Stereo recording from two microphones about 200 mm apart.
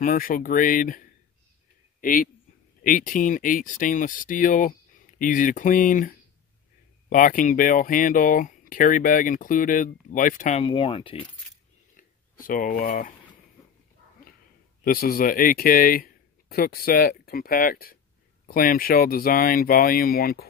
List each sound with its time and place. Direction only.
0.0 s speech: 45° left (ahead or behind)
2.0 s a sound: 45° left (ahead or behind)
2.8 s speech: 40° left (ahead or behind)
10.6 s speech: 25° left (ahead or behind)
12.0 s speech: 45° left (ahead or behind)
14.9 s speech: 45° left (ahead or behind)